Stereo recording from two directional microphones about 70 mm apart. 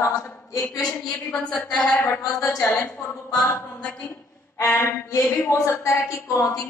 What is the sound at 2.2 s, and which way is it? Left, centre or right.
Speech, left.